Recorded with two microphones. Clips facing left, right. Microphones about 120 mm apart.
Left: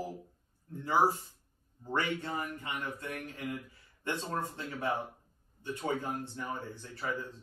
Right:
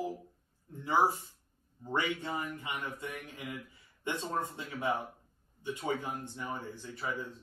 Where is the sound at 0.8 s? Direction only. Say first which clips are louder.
Left 1 dB; 15° right (ahead or behind).